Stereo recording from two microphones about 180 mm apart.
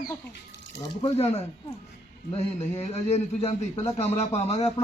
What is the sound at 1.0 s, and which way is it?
Speech, 35° left (ahead or behind).